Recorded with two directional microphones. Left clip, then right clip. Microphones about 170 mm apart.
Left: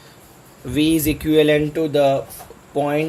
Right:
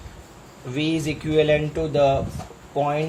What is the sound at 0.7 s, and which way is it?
Speech, 65° left (ahead or behind).